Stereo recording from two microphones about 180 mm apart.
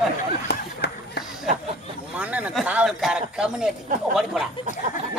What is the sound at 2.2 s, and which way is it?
A man's voice, 10° right (ahead or behind).